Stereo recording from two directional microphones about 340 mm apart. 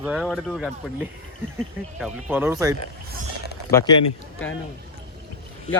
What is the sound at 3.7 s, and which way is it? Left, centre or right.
Speech, centre.